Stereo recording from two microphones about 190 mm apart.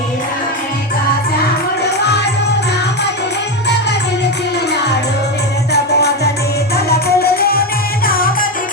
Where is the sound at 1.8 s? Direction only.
60° left (ahead or behind).